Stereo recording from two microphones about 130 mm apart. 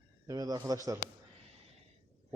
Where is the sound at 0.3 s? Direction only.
30° right (ahead or behind).